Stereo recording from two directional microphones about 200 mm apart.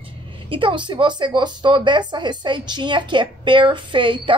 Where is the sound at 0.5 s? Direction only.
25° right (ahead or behind).